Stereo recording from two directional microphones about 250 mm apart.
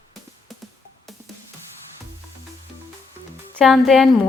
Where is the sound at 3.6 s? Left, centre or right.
Centre.